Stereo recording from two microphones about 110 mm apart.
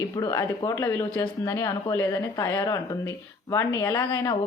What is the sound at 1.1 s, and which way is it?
Speech, 45° left (ahead or behind).